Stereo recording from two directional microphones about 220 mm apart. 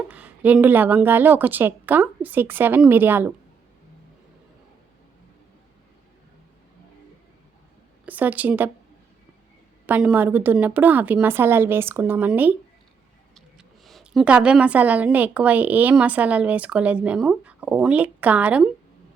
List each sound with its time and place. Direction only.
0.1 s a woman's voice: 5° right (ahead or behind)
8.0 s speech: 5° right (ahead or behind)
9.8 s a woman's voice: 5° right (ahead or behind)